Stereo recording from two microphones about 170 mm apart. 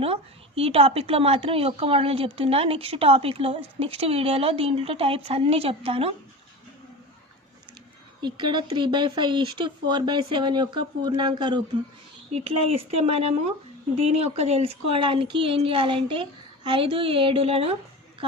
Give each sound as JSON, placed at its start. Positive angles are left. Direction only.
{"t": 0.0, "sound": "a woman's voice", "side_deg": -35}
{"t": 8.2, "sound": "a woman's voice", "side_deg": -25}